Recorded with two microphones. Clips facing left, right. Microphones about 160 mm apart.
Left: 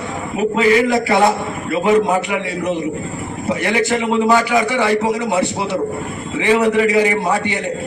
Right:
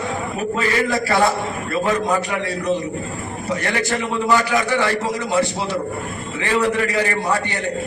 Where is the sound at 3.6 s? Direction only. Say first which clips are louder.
Left 6 dB; 20° left (ahead or behind).